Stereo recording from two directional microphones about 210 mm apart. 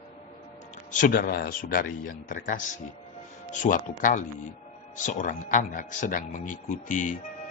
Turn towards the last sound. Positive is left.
turn(degrees=35)  # may be behind; listen again after turning